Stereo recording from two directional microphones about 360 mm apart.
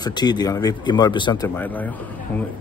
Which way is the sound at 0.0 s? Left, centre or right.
Centre.